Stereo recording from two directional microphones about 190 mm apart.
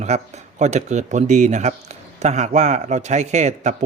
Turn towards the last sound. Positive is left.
turn(degrees=-35)  # may be behind; listen again after turning